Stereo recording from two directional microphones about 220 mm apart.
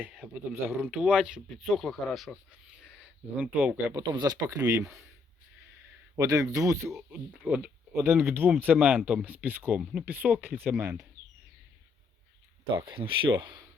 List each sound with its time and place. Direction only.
0.0 s speech: 5° right (ahead or behind)
6.1 s speech: 15° right (ahead or behind)
12.7 s speech: 20° right (ahead or behind)